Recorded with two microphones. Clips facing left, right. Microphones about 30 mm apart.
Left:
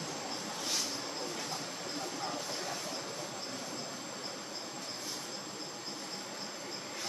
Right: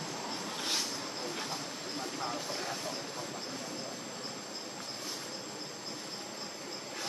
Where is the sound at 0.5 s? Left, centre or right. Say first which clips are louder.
Right 2 dB; right.